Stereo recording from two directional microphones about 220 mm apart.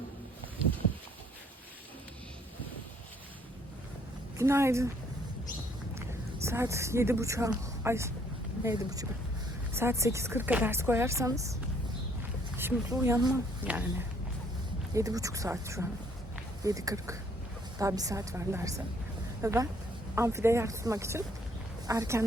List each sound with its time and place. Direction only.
4.4 s a woman's voice: 10° right (ahead or behind)
6.4 s a woman's voice: 10° right (ahead or behind)
12.5 s speech: 10° right (ahead or behind)
14.9 s a woman's voice: 15° right (ahead or behind)